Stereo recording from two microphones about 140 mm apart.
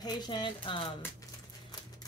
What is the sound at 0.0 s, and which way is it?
Speech, 35° left (ahead or behind).